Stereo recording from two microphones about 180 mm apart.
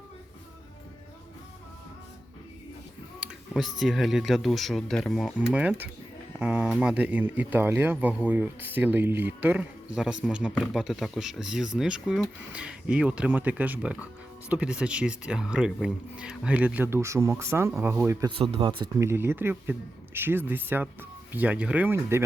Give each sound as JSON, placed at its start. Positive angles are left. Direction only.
{"t": 3.2, "sound": "speech", "side_deg": 0}
{"t": 18.3, "sound": "speech", "side_deg": -30}
{"t": 18.9, "sound": "speech", "side_deg": -15}